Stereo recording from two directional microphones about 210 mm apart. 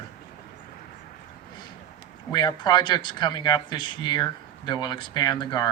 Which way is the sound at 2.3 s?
20° left (ahead or behind).